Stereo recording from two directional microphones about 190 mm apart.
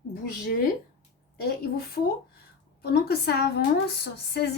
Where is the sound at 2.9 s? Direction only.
55° left (ahead or behind).